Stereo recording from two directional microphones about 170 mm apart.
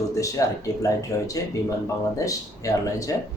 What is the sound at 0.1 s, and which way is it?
Speech, 20° left (ahead or behind).